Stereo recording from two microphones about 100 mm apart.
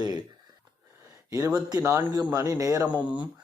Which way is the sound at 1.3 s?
30° right (ahead or behind).